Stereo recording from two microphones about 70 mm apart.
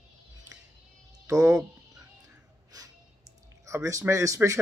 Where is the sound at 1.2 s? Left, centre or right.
Right.